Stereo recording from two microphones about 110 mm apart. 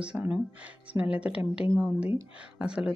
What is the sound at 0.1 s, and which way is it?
Speech, 15° right (ahead or behind).